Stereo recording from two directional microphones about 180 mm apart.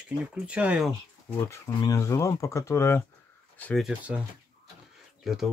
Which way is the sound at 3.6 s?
Centre (ahead or behind).